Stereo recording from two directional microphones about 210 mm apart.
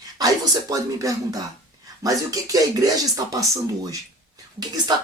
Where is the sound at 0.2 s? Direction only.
15° right (ahead or behind).